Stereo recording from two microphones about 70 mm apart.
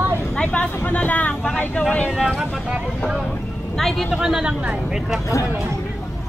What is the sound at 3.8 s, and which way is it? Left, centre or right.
Speech, centre.